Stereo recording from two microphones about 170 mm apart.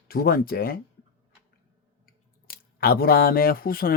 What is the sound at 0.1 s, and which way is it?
Speech, 65° left (ahead or behind).